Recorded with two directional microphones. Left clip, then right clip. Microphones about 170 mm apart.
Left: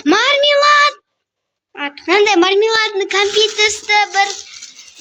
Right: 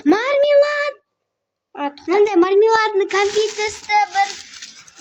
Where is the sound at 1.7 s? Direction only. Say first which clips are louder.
Left 1 dB; 35° right (ahead or behind).